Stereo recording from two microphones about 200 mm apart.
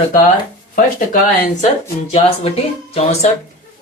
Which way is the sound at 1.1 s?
35° left (ahead or behind).